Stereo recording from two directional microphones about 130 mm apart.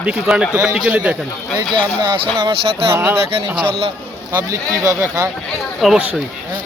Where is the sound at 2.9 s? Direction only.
20° right (ahead or behind).